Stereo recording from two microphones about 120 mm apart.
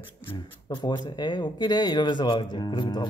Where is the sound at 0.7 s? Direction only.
40° left (ahead or behind).